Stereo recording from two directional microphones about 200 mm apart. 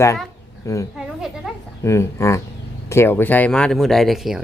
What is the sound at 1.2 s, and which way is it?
Speech, centre (ahead or behind).